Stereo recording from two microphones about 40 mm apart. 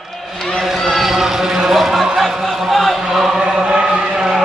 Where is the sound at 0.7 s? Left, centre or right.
Centre.